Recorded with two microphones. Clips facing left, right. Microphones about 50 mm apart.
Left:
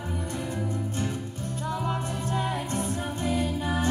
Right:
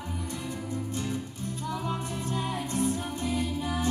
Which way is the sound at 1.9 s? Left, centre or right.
Left.